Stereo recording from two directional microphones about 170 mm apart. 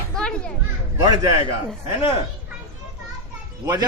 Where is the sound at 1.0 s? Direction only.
20° right (ahead or behind).